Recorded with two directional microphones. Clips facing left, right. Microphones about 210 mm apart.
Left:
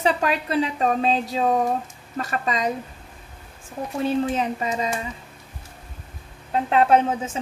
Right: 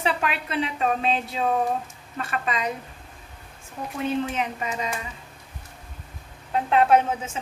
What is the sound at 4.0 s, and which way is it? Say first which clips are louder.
Speech: left 3 dB; 35° left (ahead or behind).